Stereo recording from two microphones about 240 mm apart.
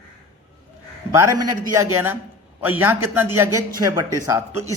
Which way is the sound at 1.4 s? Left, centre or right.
Centre.